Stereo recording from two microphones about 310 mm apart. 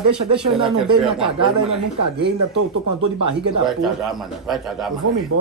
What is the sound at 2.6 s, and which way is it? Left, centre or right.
Speech, right.